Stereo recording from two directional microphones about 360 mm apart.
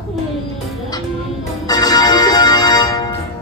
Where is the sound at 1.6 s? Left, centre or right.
Centre.